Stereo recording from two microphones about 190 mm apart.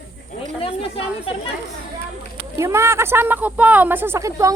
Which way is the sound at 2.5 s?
15° right (ahead or behind).